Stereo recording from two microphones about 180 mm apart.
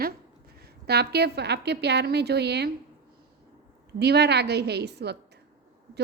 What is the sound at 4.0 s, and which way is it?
A woman's voice, 65° right (ahead or behind).